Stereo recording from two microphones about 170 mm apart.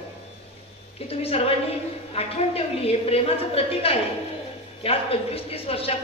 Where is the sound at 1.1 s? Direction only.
35° left (ahead or behind).